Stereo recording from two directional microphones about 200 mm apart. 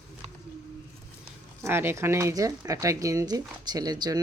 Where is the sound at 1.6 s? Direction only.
10° right (ahead or behind).